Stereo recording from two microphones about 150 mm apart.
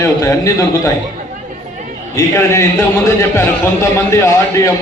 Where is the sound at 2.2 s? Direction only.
20° left (ahead or behind).